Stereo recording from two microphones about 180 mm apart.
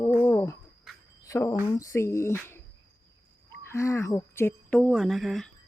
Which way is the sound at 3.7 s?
15° left (ahead or behind).